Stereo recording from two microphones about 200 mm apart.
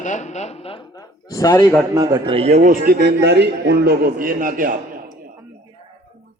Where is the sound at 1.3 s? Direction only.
20° left (ahead or behind).